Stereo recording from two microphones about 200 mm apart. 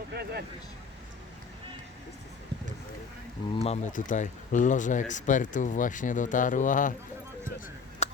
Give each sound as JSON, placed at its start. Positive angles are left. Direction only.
{"t": 0.1, "sound": "vehicle", "side_deg": -55}
{"t": 3.6, "sound": "speech", "side_deg": 35}
{"t": 8.0, "sound": "a sound", "side_deg": 35}